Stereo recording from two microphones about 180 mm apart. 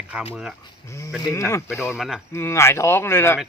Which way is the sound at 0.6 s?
15° left (ahead or behind).